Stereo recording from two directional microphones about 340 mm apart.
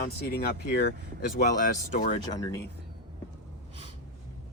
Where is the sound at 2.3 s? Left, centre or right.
Centre.